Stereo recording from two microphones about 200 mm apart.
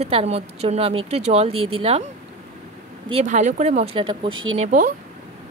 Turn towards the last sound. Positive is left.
turn(degrees=-40)  # may be behind; listen again after turning